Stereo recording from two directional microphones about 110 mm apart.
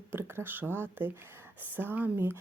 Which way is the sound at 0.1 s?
20° right (ahead or behind).